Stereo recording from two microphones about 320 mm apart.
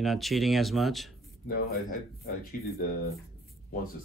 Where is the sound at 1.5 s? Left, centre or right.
Left.